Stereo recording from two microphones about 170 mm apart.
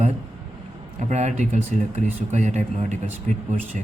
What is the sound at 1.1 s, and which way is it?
Speech, 40° right (ahead or behind).